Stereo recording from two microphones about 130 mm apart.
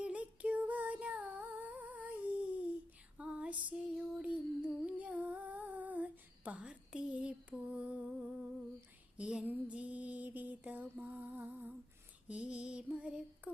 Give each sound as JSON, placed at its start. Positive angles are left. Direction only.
{"t": 0.0, "sound": "female singing", "side_deg": -10}
{"t": 4.9, "sound": "humming", "side_deg": -10}
{"t": 9.1, "sound": "a sound", "side_deg": -10}
{"t": 12.3, "sound": "music", "side_deg": -10}